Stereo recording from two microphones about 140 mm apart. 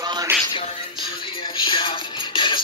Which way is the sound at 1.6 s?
35° left (ahead or behind).